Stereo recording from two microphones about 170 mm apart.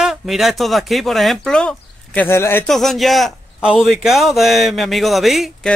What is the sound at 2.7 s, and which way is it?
Speech, centre (ahead or behind).